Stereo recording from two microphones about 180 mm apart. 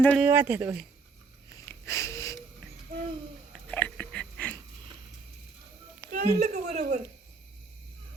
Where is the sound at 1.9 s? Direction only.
15° left (ahead or behind).